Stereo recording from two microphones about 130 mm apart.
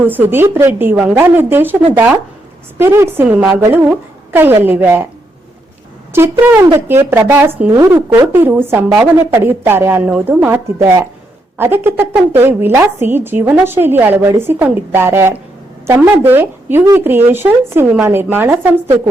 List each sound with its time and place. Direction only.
0.0 s a woman's voice: 15° right (ahead or behind)
6.1 s a woman's voice: 15° right (ahead or behind)